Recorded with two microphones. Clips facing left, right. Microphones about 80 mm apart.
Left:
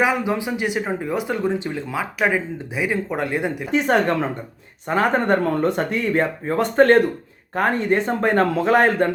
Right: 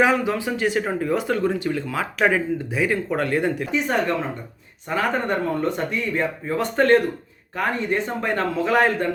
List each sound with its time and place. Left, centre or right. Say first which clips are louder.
0.0 s speech: right 1 dB; centre
2.0 s speech: even; centre
3.7 s speech: left 4 dB; left
6.4 s speech: left 5 dB; left